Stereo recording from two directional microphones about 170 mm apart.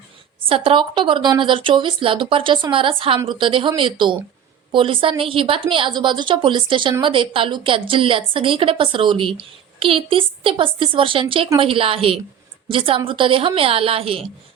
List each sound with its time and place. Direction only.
0.4 s a woman's voice: 30° right (ahead or behind)